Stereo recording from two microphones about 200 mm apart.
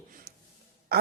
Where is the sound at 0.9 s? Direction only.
55° right (ahead or behind).